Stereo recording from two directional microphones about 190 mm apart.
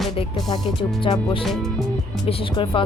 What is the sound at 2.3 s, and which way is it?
Speech, 30° left (ahead or behind).